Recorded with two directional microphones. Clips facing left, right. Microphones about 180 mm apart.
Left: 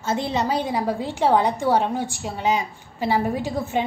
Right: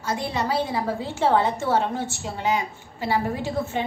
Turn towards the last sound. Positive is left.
turn(degrees=15)  # may be behind; listen again after turning